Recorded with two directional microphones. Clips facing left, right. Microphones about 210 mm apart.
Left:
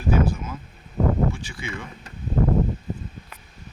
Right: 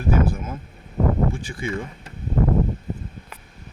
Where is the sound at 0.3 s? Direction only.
55° right (ahead or behind).